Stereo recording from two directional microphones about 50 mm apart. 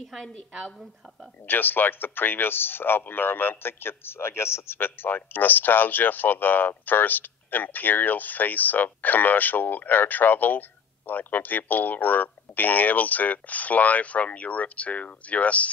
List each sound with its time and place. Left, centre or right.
1.5 s a man's voice: left